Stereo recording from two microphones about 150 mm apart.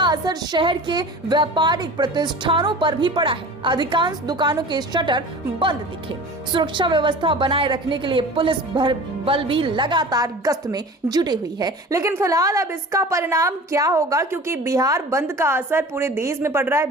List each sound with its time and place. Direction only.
0.0 s a woman's voice: 30° right (ahead or behind)